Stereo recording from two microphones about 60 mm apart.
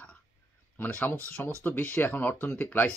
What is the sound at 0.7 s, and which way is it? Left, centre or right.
A man's voice, left.